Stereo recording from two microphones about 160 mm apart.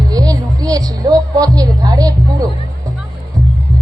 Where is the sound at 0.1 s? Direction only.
25° right (ahead or behind).